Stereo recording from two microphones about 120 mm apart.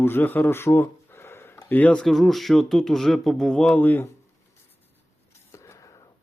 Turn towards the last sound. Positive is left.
turn(degrees=30)  # may be behind; listen again after turning